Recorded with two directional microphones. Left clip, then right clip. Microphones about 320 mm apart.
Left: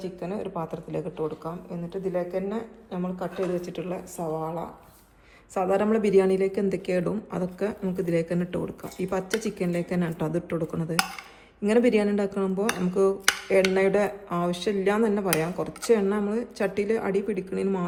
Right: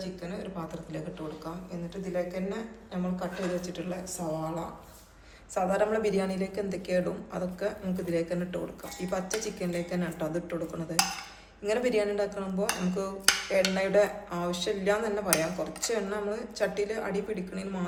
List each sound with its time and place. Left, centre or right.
0.2 s speech: centre
5.5 s speech: left